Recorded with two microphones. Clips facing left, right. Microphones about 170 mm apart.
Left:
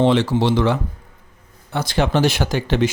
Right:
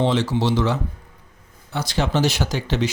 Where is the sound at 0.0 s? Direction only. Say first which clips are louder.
Left 4 dB; 60° left (ahead or behind).